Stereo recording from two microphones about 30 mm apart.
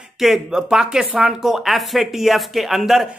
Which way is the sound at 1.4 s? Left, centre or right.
Centre.